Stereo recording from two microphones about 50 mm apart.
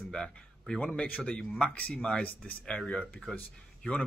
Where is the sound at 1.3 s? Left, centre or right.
Centre.